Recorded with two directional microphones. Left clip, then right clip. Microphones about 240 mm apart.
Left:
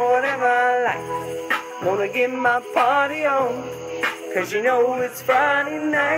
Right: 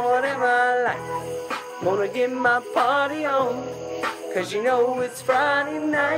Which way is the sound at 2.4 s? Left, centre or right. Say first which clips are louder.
Left 1 dB; centre.